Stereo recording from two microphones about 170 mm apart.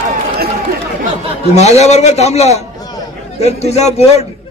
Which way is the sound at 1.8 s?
40° left (ahead or behind).